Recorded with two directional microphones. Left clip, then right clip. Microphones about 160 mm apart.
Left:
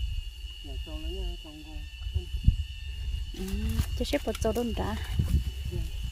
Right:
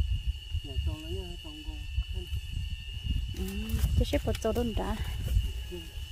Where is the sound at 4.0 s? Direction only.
15° left (ahead or behind).